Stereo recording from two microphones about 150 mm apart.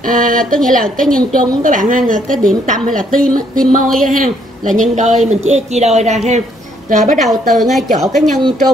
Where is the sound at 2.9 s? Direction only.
60° right (ahead or behind).